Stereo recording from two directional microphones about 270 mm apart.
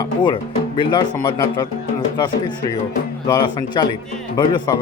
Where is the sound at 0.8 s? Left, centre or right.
Centre.